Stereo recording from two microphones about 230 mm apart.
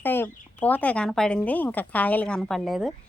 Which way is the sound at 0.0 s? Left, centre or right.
Centre.